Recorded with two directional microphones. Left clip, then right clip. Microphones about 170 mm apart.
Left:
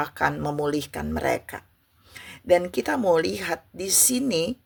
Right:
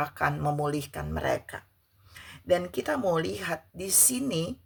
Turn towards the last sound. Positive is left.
turn(degrees=30)  # may be behind; listen again after turning